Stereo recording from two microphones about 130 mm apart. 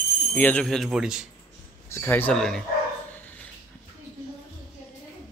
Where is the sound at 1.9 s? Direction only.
15° left (ahead or behind).